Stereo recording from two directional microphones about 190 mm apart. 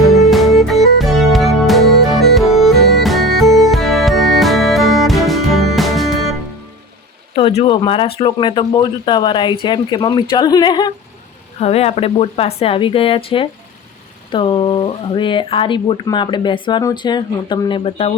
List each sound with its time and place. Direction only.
0.0 s music: centre (ahead or behind)
7.3 s speech: 30° left (ahead or behind)
11.6 s speech: 35° left (ahead or behind)